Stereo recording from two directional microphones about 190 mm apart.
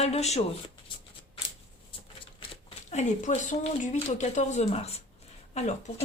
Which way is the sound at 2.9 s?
40° left (ahead or behind).